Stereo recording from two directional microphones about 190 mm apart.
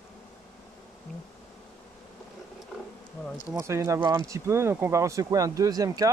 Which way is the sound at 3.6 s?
15° right (ahead or behind).